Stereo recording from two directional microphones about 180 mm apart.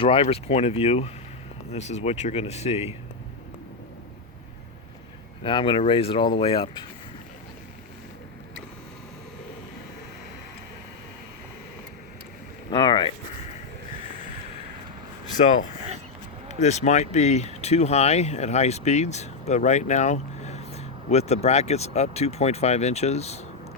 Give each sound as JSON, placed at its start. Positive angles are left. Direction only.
{"t": 0.0, "sound": "speech", "side_deg": 30}
{"t": 5.4, "sound": "speech", "side_deg": 25}
{"t": 12.7, "sound": "speech", "side_deg": 25}
{"t": 16.5, "sound": "speech", "side_deg": 40}